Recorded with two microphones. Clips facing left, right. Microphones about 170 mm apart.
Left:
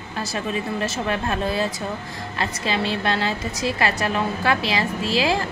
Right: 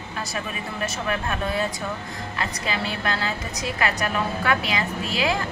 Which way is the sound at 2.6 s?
30° left (ahead or behind).